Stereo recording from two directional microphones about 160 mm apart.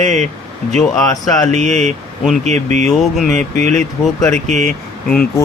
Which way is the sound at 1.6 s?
45° right (ahead or behind).